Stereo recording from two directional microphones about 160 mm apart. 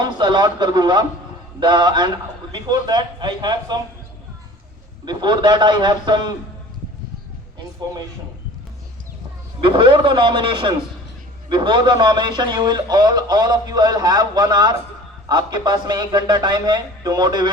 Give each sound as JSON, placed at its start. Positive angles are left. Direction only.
{"t": 0.0, "sound": "a man's voice", "side_deg": -30}
{"t": 5.0, "sound": "a man's voice", "side_deg": -30}
{"t": 9.6, "sound": "a man's voice", "side_deg": -30}